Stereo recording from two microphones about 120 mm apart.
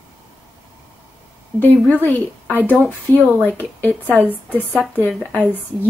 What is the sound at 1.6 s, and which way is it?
Speech, 15° left (ahead or behind).